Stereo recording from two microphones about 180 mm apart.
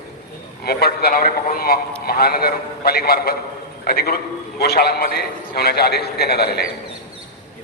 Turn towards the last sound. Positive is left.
turn(degrees=60)  # may be behind; listen again after turning